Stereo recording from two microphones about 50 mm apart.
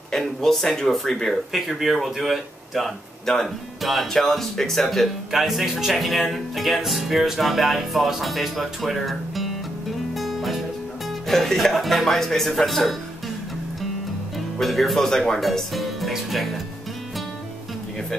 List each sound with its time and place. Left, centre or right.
0.1 s speech: centre
10.1 s music: centre
11.2 s speech: centre
14.6 s speech: centre
15.4 s music: centre